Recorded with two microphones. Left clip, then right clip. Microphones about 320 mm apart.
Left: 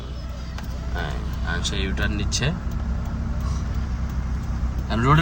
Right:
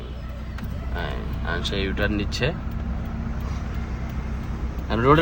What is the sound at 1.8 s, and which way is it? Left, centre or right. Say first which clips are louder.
Speech: right 2 dB; centre.